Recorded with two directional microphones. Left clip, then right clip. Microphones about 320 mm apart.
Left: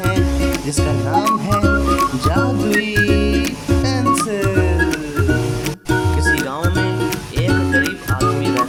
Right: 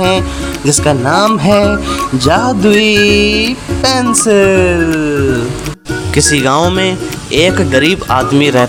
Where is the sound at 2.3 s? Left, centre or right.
Left.